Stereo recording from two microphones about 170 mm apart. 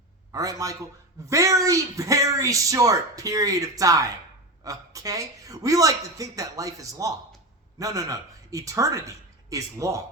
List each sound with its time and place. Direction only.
0.3 s a woman's voice: 20° right (ahead or behind)